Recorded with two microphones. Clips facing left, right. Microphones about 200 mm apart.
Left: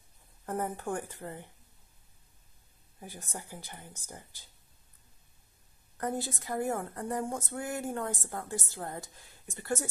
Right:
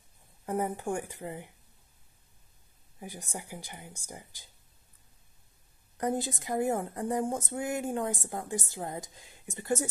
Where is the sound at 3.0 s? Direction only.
15° right (ahead or behind).